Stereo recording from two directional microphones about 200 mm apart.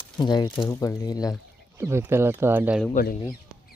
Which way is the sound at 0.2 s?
20° left (ahead or behind).